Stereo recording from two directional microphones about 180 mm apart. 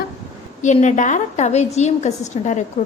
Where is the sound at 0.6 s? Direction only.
40° left (ahead or behind).